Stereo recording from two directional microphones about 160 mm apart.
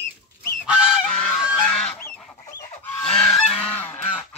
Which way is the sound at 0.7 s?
5° right (ahead or behind).